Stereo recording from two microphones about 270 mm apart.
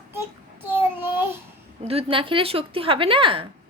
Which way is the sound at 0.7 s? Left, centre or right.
Centre.